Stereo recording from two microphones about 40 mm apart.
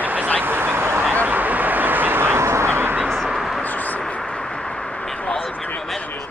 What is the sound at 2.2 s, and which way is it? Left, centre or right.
Duck, right.